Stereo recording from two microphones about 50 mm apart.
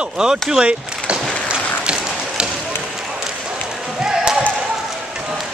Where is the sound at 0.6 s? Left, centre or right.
Right.